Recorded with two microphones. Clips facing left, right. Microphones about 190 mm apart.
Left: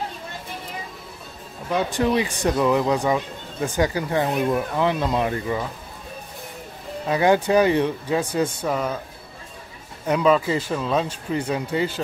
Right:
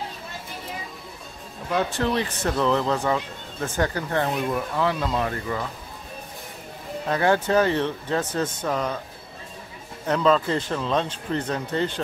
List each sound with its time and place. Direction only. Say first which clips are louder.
1.7 s speech: left 3 dB; 10° left (ahead or behind)
7.1 s speech: left 3 dB; 15° left (ahead or behind)
10.0 s speech: left 2 dB; 10° left (ahead or behind)